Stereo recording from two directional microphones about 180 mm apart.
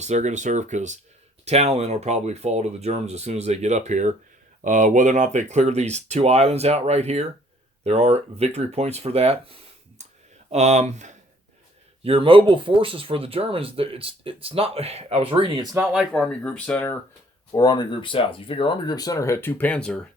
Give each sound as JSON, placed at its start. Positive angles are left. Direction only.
{"t": 0.0, "sound": "speech", "side_deg": -40}
{"t": 12.0, "sound": "speech", "side_deg": -30}
{"t": 15.7, "sound": "speech", "side_deg": -10}
{"t": 17.5, "sound": "speech", "side_deg": 20}